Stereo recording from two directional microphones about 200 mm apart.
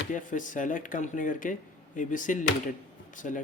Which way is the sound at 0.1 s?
40° left (ahead or behind).